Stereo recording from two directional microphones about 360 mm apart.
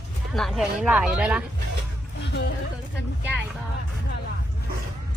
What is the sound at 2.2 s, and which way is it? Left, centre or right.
Speech, left.